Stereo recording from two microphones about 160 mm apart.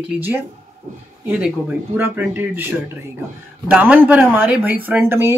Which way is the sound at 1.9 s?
10° right (ahead or behind).